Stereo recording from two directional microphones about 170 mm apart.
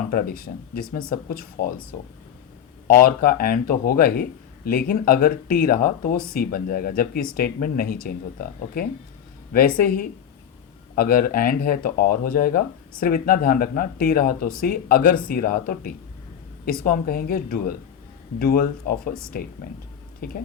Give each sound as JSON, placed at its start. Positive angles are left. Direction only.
{"t": 0.1, "sound": "speech", "side_deg": 55}
{"t": 2.8, "sound": "speech", "side_deg": 55}
{"t": 20.2, "sound": "speech", "side_deg": 60}